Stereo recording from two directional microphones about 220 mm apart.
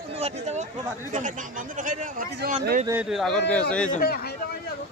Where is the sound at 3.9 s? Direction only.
45° left (ahead or behind).